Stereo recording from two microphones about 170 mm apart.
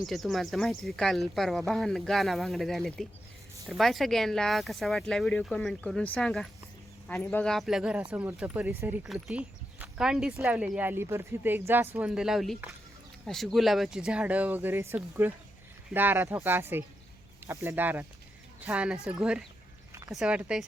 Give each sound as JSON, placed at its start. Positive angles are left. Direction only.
{"t": 0.1, "sound": "speech", "side_deg": 0}
{"t": 19.9, "sound": "a sound", "side_deg": -15}
{"t": 20.1, "sound": "speech", "side_deg": -5}